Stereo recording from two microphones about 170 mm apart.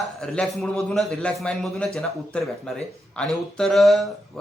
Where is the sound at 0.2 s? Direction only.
5° left (ahead or behind).